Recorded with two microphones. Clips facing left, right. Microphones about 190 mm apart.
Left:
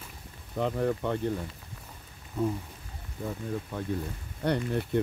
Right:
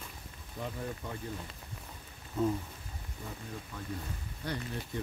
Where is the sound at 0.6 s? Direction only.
65° left (ahead or behind).